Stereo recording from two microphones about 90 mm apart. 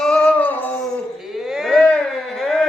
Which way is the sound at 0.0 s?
10° left (ahead or behind).